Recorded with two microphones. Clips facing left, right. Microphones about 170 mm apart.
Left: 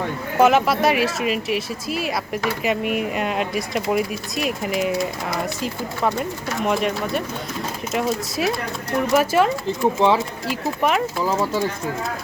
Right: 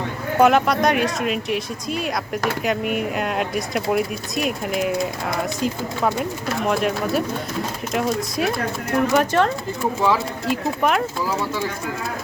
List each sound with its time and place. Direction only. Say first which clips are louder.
0.3 s speech: even; centre (ahead or behind)
9.8 s speech: left 3 dB; 25° left (ahead or behind)
10.4 s speech: right 1 dB; centre (ahead or behind)